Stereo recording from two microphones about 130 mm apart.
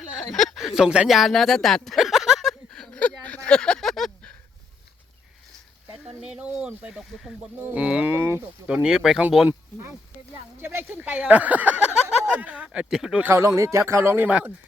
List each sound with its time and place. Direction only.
0.3 s a sound: centre (ahead or behind)
6.1 s speech: 5° right (ahead or behind)
7.6 s speech: 10° right (ahead or behind)
10.6 s speech: 20° right (ahead or behind)
13.2 s speech: 20° right (ahead or behind)